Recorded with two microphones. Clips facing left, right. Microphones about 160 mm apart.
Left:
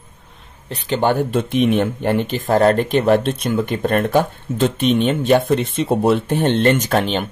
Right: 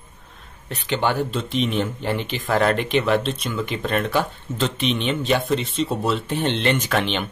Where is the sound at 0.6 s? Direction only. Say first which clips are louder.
Left 5 dB; 35° left (ahead or behind).